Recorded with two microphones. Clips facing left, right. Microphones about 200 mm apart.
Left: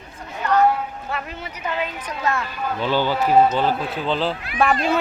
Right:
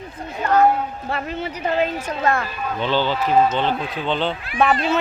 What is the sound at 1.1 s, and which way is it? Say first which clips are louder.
A woman's voice: right 7 dB; 30° right (ahead or behind).